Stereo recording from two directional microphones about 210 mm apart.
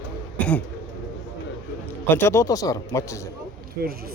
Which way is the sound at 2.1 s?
10° left (ahead or behind).